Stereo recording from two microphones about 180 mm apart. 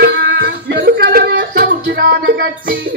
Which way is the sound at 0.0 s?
60° right (ahead or behind).